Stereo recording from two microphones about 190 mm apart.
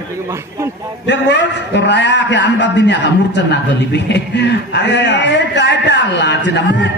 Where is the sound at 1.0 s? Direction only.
70° left (ahead or behind).